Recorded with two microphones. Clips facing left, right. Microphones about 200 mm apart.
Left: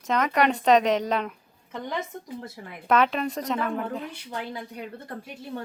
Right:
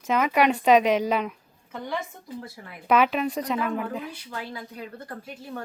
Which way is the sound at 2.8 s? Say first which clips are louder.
Right 1 dB; 5° right (ahead or behind).